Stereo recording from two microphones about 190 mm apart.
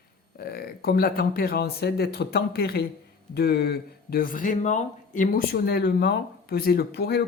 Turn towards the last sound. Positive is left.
turn(degrees=55)  # may be behind; listen again after turning